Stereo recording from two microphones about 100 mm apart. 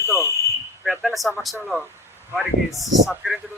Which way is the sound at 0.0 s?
25° left (ahead or behind).